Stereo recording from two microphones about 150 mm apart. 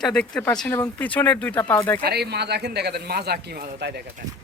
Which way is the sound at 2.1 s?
90° right.